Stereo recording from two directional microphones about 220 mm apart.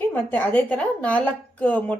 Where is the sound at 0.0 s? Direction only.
10° left (ahead or behind).